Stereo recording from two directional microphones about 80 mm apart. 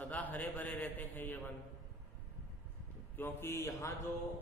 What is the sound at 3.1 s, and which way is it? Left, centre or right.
Speech, left.